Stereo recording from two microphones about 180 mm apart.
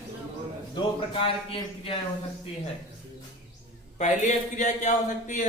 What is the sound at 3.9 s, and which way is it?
A man's voice, 40° left (ahead or behind).